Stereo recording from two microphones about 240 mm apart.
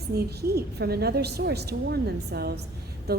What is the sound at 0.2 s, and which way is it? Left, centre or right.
Speech, right.